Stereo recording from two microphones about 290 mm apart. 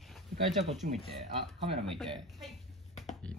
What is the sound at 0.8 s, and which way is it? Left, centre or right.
Speech, right.